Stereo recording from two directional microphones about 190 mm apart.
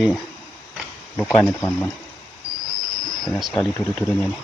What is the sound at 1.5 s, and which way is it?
Speech, 10° left (ahead or behind).